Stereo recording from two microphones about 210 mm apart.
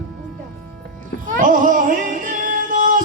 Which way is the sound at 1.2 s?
40° right (ahead or behind).